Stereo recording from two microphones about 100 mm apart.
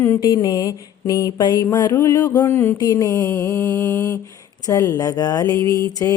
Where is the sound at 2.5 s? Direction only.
20° left (ahead or behind).